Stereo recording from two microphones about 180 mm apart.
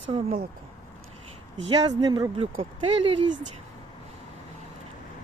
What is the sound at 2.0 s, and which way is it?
Speech, 20° right (ahead or behind).